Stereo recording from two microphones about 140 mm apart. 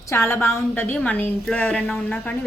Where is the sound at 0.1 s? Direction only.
20° left (ahead or behind).